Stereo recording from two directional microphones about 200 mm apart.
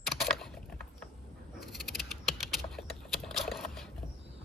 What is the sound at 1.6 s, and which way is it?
Typing, centre (ahead or behind).